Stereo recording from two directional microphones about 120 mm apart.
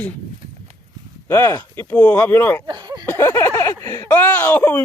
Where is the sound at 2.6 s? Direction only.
35° right (ahead or behind).